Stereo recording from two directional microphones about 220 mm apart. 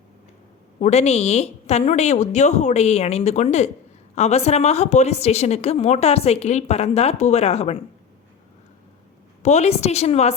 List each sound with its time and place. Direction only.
0.8 s a woman's voice: 30° left (ahead or behind)
9.4 s a woman's voice: 30° left (ahead or behind)